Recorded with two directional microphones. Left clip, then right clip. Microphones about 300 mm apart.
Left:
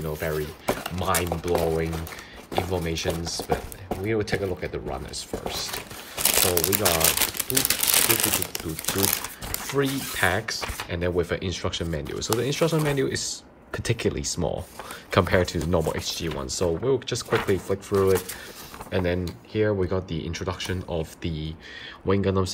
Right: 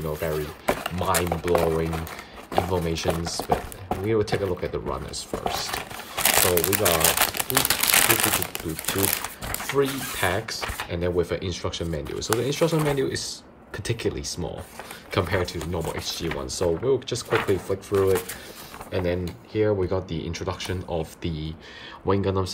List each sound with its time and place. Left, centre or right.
0.0 s speech: centre
2.5 s speech: centre
6.1 s crumpling: centre
6.9 s speech: centre
7.3 s crumpling: right
8.1 s speech: centre
8.8 s speech: centre
9.6 s speech: centre